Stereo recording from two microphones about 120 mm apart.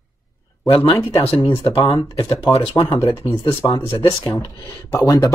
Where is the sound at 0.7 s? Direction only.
45° left (ahead or behind).